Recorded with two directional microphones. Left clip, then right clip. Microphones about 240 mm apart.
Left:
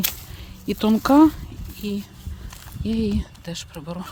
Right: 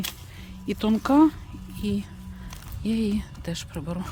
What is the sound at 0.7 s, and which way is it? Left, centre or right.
Speech, centre.